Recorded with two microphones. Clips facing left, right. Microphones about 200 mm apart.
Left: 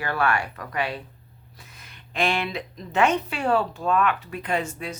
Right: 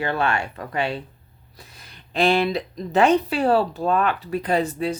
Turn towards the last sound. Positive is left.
turn(degrees=-35)  # may be behind; listen again after turning